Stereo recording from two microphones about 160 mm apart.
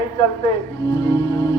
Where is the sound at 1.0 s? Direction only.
25° left (ahead or behind).